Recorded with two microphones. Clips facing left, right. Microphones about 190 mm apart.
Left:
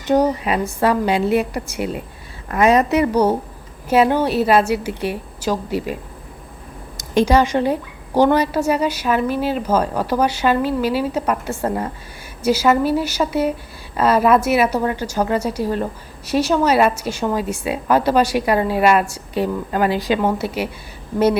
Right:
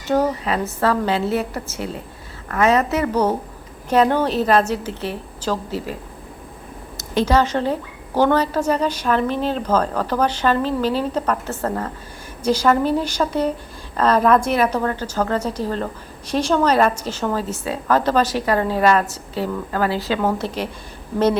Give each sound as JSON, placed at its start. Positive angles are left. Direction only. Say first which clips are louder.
{"t": 0.1, "sound": "a woman's voice", "louder": "left 3 dB", "side_deg": 15}